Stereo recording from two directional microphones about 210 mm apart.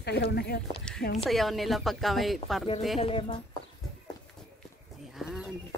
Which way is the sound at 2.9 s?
25° left (ahead or behind).